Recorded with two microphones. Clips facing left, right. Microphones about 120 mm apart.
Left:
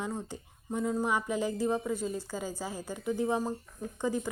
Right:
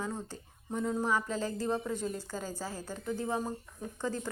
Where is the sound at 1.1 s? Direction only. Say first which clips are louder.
Left 2 dB; 15° left (ahead or behind).